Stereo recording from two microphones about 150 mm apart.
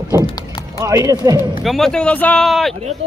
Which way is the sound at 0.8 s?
20° right (ahead or behind).